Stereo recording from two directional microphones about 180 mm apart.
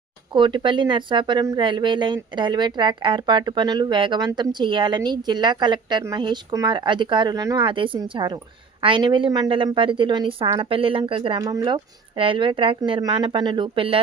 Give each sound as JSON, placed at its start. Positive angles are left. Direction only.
{"t": 0.3, "sound": "speech", "side_deg": -25}